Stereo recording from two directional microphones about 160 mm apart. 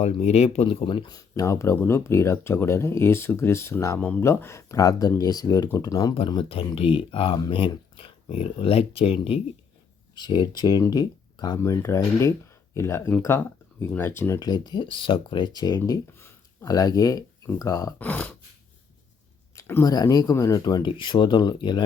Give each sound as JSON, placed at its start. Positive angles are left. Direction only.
{"t": 0.0, "sound": "speech", "side_deg": 40}
{"t": 6.1, "sound": "speech", "side_deg": 35}
{"t": 15.8, "sound": "speech", "side_deg": 15}
{"t": 19.5, "sound": "a sound", "side_deg": 15}
{"t": 19.9, "sound": "speech", "side_deg": 25}